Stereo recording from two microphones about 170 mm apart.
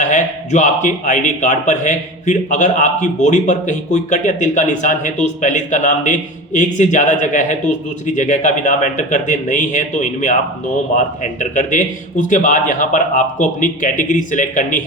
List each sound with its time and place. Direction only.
0.0 s a man's voice: 45° left (ahead or behind)